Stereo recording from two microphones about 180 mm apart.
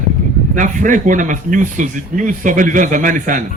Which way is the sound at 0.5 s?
45° right (ahead or behind).